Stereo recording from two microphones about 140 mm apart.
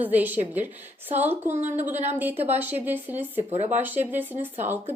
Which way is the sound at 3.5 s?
50° right (ahead or behind).